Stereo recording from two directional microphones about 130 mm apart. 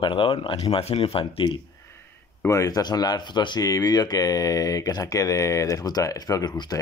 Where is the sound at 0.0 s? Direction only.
40° left (ahead or behind).